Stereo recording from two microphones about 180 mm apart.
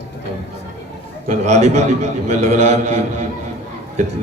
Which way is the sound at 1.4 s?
40° right (ahead or behind).